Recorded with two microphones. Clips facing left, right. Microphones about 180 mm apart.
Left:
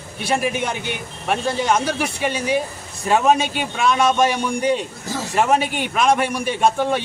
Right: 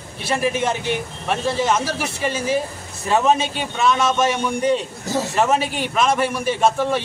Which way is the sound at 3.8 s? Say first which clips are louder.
Left 1 dB; centre (ahead or behind).